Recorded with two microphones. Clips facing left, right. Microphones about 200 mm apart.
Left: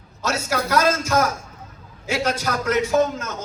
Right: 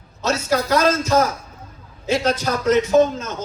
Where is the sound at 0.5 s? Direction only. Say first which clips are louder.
Right 2 dB; 35° right (ahead or behind).